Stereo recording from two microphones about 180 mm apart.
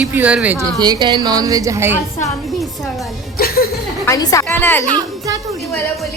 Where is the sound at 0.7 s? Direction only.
25° right (ahead or behind).